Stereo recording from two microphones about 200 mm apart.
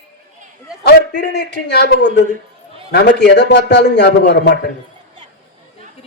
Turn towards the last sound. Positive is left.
turn(degrees=60)  # may be behind; listen again after turning